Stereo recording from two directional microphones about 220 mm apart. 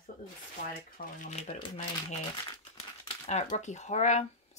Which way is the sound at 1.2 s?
30° left (ahead or behind).